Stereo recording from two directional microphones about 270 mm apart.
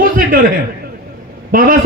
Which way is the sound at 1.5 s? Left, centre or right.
Right.